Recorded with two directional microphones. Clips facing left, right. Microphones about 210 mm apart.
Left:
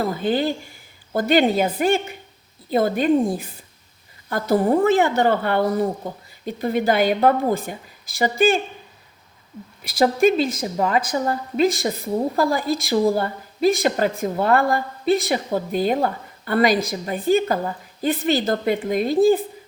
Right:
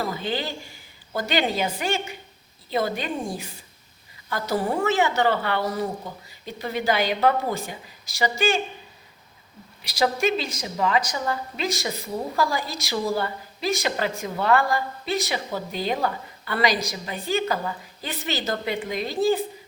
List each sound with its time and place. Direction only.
0.0 s a woman's voice: 55° left (ahead or behind)
4.6 s a woman's voice: 35° left (ahead or behind)
4.9 s a woman's voice: 55° left (ahead or behind)
9.8 s a woman's voice: 55° left (ahead or behind)